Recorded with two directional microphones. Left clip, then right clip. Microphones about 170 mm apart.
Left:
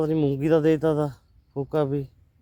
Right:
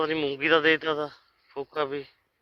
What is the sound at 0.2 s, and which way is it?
Speech, 90° left.